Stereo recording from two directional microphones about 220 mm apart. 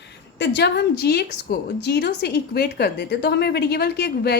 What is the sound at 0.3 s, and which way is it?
A woman's voice, 50° left (ahead or behind).